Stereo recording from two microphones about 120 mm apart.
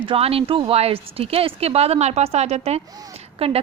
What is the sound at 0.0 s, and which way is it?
Speech, 50° right (ahead or behind).